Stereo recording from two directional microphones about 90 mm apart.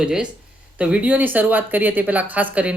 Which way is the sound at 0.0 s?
10° right (ahead or behind).